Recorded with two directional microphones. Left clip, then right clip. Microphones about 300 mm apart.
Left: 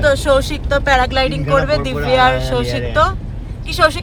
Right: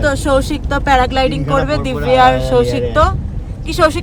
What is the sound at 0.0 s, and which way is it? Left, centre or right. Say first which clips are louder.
Speech: left 1 dB; centre.